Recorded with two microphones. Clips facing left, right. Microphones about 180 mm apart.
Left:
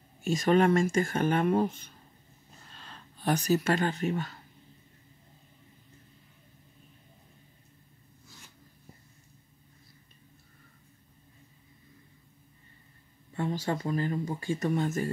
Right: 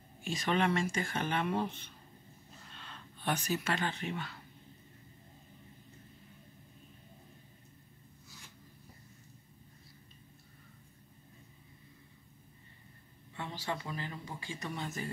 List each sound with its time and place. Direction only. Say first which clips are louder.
0.2 s speech: left 8 dB; 45° left (ahead or behind)
13.3 s speech: left 8 dB; 45° left (ahead or behind)